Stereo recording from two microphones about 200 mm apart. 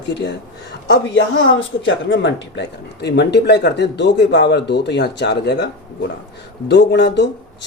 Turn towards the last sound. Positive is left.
turn(degrees=60)  # may be behind; listen again after turning